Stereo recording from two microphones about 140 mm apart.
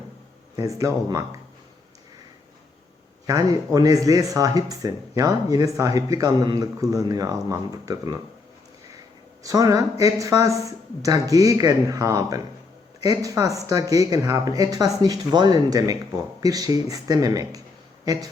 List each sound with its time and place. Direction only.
0.5 s speech: 25° right (ahead or behind)
3.2 s speech: 25° right (ahead or behind)
9.4 s speech: 25° right (ahead or behind)